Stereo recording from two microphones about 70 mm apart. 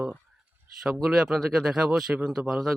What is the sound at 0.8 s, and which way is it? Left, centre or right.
Speech, centre.